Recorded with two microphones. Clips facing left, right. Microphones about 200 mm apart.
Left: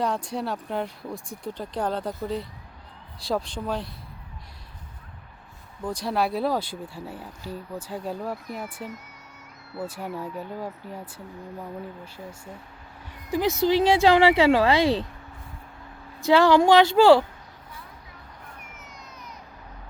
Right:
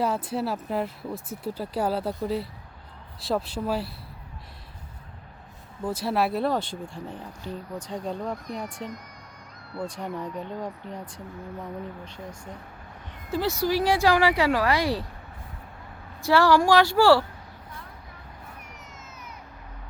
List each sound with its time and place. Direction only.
0.0 s speech: 5° right (ahead or behind)
5.8 s speech: 5° right (ahead or behind)
13.3 s speech: 20° left (ahead or behind)
16.2 s speech: 20° left (ahead or behind)